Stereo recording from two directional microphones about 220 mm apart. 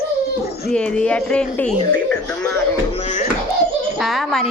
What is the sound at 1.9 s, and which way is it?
Music, 5° left (ahead or behind).